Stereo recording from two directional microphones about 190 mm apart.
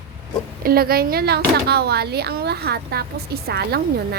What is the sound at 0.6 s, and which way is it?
Speech, 55° right (ahead or behind).